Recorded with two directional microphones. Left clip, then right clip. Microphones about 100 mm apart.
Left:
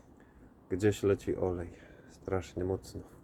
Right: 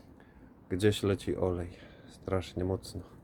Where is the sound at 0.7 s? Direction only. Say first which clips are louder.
Even; 15° right (ahead or behind).